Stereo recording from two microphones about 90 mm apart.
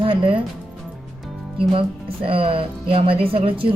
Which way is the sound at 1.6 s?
85° right.